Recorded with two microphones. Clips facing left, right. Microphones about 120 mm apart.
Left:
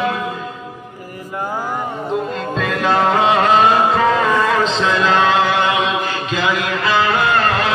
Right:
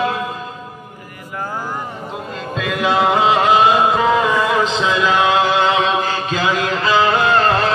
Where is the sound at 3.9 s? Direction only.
15° right (ahead or behind).